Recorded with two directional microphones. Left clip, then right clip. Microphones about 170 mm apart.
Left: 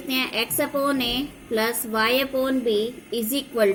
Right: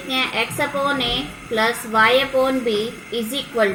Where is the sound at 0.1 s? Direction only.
45° left (ahead or behind).